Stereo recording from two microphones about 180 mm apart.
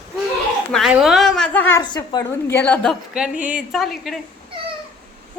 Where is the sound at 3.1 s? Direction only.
5° right (ahead or behind).